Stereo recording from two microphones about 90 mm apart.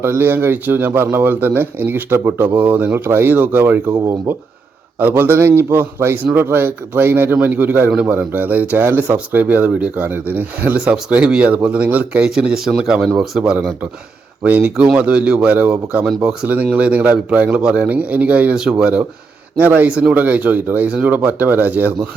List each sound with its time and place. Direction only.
0.0 s speech: 25° right (ahead or behind)
4.9 s a man's voice: 20° right (ahead or behind)